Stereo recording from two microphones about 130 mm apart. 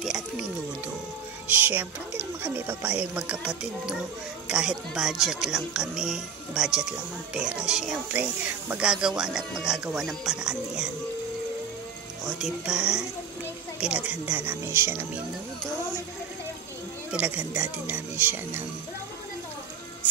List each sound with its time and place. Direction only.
0.0 s music: 5° right (ahead or behind)
1.5 s speech: 15° right (ahead or behind)
12.4 s speech: 5° right (ahead or behind)
17.1 s speech: 10° right (ahead or behind)